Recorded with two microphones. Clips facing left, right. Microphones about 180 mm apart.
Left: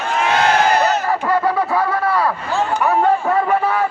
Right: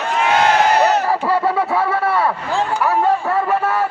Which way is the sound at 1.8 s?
25° right (ahead or behind).